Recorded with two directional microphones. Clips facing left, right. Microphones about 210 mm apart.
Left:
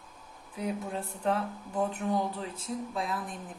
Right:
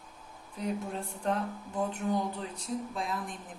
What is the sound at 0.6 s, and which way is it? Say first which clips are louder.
Speech: left 1 dB; 5° left (ahead or behind).